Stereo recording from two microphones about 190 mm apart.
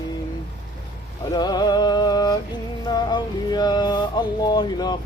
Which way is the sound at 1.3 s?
20° left (ahead or behind).